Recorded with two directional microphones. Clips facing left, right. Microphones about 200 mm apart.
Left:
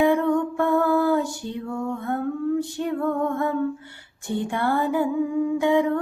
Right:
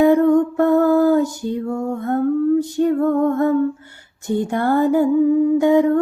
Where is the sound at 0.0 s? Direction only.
40° right (ahead or behind).